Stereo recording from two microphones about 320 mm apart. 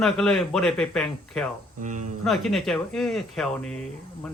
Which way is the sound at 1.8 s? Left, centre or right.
Right.